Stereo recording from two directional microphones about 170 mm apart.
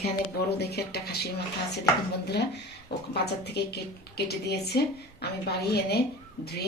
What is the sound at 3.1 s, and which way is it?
A woman's voice, 75° left (ahead or behind).